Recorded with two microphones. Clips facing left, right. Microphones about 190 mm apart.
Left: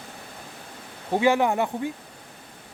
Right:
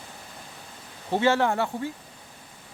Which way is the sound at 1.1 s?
15° left (ahead or behind).